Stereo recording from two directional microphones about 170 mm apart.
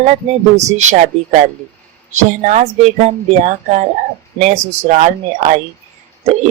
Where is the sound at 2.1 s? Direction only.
45° right (ahead or behind).